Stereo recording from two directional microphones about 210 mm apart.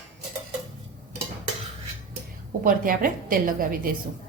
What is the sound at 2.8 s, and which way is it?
Speech, 40° right (ahead or behind).